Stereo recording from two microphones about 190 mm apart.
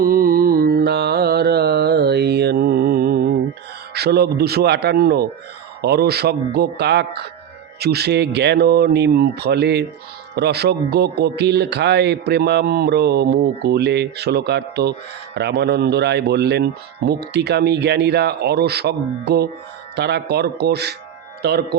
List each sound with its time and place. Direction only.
0.0 s music: 50° right (ahead or behind)
3.9 s speech: 55° right (ahead or behind)